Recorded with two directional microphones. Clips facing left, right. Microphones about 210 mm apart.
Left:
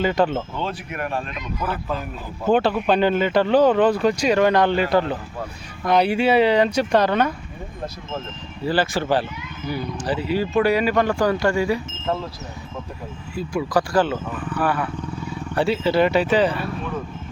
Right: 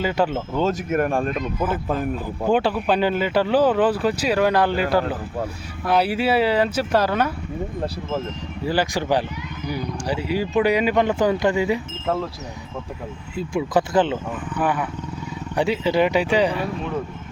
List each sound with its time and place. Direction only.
0.0 s speech: 10° right (ahead or behind)
0.5 s speech: 45° right (ahead or behind)
2.5 s speech: 10° right (ahead or behind)
8.6 s speech: 15° right (ahead or behind)
13.3 s speech: 20° right (ahead or behind)